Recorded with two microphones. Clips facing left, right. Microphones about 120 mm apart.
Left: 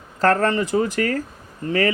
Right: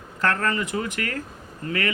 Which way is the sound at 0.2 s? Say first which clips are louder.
Left 6 dB; 35° left (ahead or behind).